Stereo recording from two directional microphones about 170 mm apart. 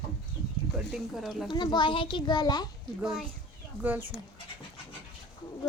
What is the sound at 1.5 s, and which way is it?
A child's voice, 25° left (ahead or behind).